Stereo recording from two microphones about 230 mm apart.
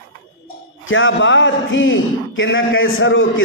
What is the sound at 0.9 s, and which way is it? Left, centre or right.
A man's voice, left.